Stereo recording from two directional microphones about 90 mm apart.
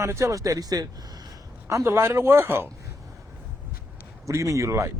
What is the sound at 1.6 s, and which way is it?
Speech, 30° right (ahead or behind).